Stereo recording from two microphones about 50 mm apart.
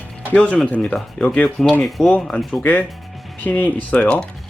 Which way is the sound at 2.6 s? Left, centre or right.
Left.